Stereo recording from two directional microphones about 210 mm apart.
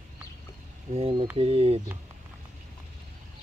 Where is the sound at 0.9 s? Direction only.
25° right (ahead or behind).